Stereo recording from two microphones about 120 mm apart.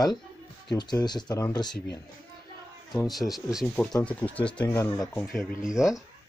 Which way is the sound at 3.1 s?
Centre (ahead or behind).